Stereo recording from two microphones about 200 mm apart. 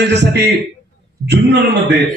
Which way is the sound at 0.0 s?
60° right (ahead or behind).